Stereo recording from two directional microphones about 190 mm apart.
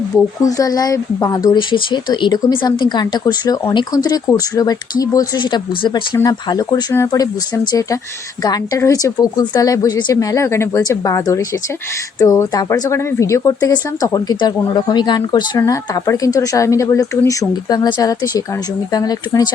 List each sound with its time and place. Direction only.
0.4 s speech: 20° left (ahead or behind)